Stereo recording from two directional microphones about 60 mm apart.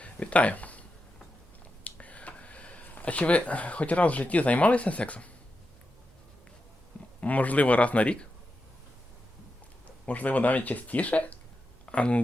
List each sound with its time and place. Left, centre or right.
0.0 s a sound: left
1.8 s speech: left
7.2 s speech: left
9.8 s speech: left